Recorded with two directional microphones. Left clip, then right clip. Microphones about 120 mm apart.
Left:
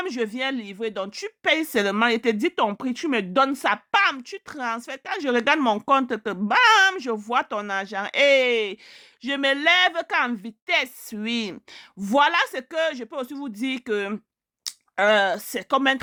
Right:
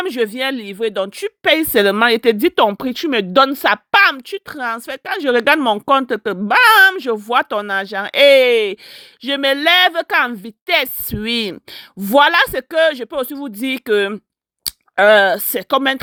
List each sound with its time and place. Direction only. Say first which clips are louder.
0.0 s a woman's voice: right 8 dB; 35° right (ahead or behind)
9.2 s a woman's voice: right 6 dB; 30° right (ahead or behind)